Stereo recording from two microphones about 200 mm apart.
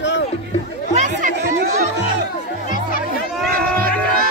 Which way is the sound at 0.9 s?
35° right (ahead or behind).